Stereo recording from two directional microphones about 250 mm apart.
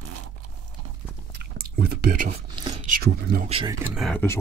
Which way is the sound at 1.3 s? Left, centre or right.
Right.